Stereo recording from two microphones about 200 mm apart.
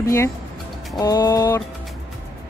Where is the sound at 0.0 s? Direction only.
15° left (ahead or behind).